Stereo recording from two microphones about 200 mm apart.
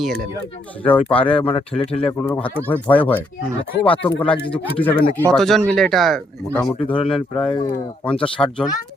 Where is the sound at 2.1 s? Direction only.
10° left (ahead or behind).